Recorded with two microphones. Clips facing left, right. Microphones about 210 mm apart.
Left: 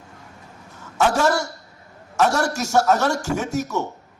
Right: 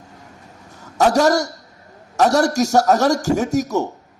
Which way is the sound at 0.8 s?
40° right (ahead or behind).